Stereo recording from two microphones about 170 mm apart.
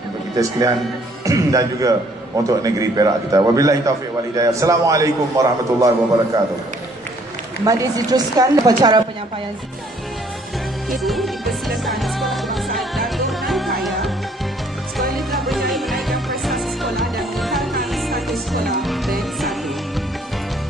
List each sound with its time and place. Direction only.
0.4 s a man's voice: 20° right (ahead or behind)
7.6 s a man's voice: 20° right (ahead or behind)
10.9 s music: centre (ahead or behind)
15.1 s music: centre (ahead or behind)